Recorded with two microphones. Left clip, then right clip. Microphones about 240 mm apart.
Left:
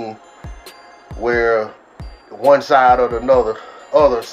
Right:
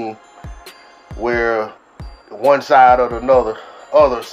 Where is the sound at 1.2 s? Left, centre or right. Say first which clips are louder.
Left 1 dB; centre.